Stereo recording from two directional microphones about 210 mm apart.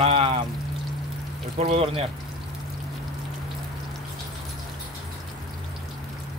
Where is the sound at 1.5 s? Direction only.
30° right (ahead or behind).